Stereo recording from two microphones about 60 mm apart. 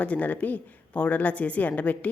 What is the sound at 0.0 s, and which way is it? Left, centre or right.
A woman's voice, left.